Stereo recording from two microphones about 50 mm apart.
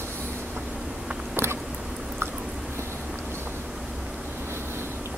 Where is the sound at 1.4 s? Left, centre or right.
Right.